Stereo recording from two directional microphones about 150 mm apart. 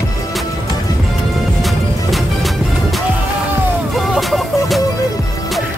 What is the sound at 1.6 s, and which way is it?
Music, centre (ahead or behind).